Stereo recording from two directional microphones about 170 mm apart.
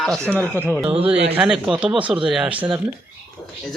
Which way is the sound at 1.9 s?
30° right (ahead or behind).